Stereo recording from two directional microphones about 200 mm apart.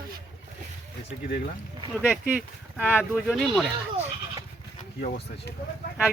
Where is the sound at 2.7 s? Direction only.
5° right (ahead or behind).